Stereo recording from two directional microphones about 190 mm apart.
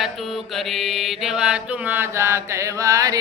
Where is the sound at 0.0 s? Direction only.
Centre (ahead or behind).